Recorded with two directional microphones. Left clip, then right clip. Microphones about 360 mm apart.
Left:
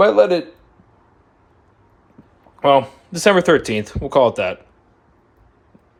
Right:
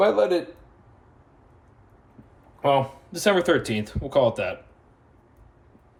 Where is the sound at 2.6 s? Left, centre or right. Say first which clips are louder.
Left 7 dB; left.